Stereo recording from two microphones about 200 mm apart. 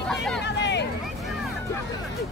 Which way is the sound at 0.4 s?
60° left (ahead or behind).